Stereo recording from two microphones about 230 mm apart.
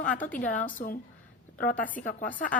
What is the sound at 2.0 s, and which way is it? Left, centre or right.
Speech, left.